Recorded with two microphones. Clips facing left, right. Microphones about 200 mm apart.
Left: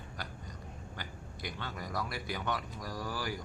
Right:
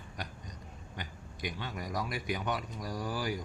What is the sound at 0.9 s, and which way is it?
A man's voice, 20° right (ahead or behind).